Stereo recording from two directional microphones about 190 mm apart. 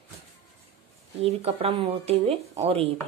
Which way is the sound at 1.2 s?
30° right (ahead or behind).